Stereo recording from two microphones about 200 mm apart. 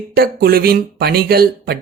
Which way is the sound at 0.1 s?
50° right (ahead or behind).